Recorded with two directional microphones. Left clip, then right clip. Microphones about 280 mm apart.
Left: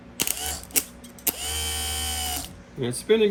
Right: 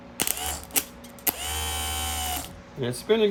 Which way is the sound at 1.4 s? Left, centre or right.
Centre.